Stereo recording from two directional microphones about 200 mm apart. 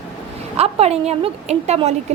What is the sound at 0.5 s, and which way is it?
A woman's voice, 30° right (ahead or behind).